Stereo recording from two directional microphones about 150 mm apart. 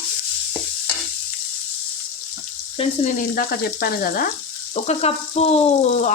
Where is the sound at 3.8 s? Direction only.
85° left.